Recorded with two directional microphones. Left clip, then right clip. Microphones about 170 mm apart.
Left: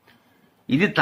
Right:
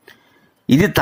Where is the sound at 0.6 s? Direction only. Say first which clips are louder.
Right 6 dB; 50° right (ahead or behind).